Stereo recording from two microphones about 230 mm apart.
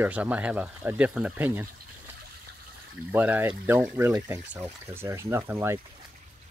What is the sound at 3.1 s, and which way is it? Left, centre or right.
Speech, centre.